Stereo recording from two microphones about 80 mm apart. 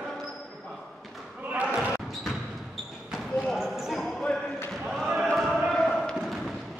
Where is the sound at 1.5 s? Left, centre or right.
Centre.